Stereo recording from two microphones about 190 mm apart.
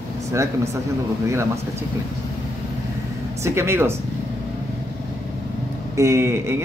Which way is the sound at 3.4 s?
15° right (ahead or behind).